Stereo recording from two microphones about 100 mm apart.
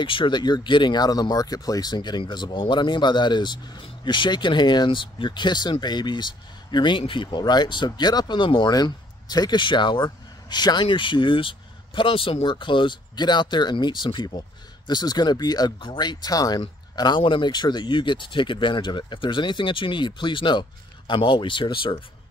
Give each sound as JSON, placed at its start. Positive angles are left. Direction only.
{"t": 0.0, "sound": "speech", "side_deg": 60}
{"t": 17.2, "sound": "speech", "side_deg": 55}